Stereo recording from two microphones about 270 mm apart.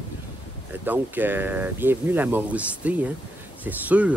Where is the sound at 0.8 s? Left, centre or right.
Centre.